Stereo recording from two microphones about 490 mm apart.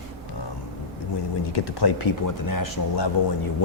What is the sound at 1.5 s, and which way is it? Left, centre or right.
A man's voice, left.